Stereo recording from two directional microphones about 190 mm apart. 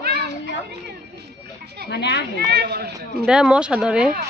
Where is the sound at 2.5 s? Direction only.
55° right (ahead or behind).